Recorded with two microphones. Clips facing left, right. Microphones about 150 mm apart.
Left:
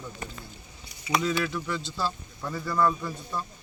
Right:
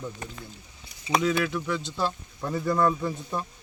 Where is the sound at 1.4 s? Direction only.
10° right (ahead or behind).